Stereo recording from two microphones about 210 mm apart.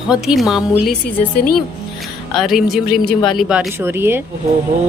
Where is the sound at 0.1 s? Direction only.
Centre (ahead or behind).